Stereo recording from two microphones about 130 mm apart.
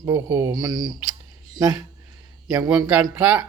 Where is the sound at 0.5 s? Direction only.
30° right (ahead or behind).